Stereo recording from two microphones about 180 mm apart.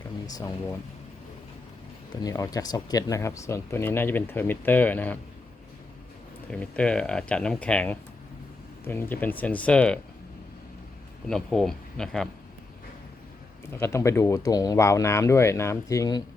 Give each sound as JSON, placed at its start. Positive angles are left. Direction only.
{"t": 0.3, "sound": "speech", "side_deg": 20}
{"t": 2.2, "sound": "speech", "side_deg": 20}
{"t": 6.5, "sound": "speech", "side_deg": 5}
{"t": 11.3, "sound": "speech", "side_deg": 5}
{"t": 13.7, "sound": "speech", "side_deg": 15}